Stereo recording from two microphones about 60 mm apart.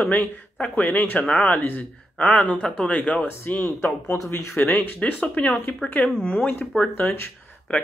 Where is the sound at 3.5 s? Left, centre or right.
Left.